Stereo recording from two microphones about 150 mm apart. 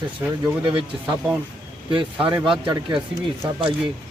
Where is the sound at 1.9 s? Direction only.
35° right (ahead or behind).